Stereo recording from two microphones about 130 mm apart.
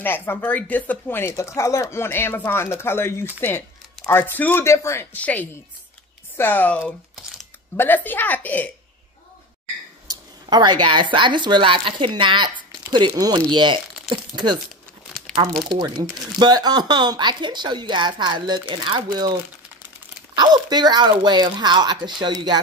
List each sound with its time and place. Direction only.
0.0 s speech: 15° left (ahead or behind)
10.0 s speech: 35° right (ahead or behind)
16.3 s speech: 30° right (ahead or behind)
20.3 s speech: 35° right (ahead or behind)